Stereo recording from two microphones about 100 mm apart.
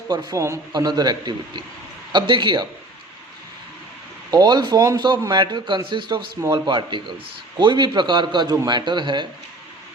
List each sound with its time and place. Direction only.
0.1 s a man's voice: 45° right (ahead or behind)
0.3 s a man's voice: 30° right (ahead or behind)
0.7 s a man's voice: 45° right (ahead or behind)
4.3 s a man's voice: 45° right (ahead or behind)